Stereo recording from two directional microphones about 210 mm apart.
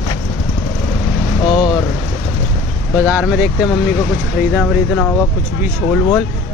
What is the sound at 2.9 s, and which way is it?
Speech, 5° right (ahead or behind).